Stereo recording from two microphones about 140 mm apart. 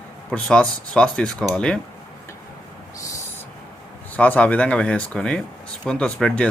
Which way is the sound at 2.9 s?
25° left (ahead or behind).